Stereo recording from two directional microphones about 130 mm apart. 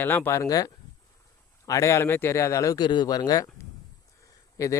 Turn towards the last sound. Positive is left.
turn(degrees=25)  # may be behind; listen again after turning